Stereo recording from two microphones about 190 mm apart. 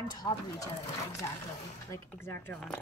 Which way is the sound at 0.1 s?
20° left (ahead or behind).